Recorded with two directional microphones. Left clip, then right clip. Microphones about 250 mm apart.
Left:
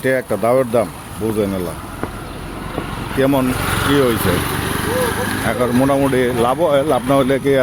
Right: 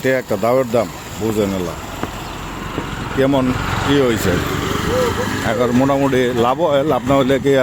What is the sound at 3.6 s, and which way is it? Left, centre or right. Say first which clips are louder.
Vehicle: left 2 dB; left.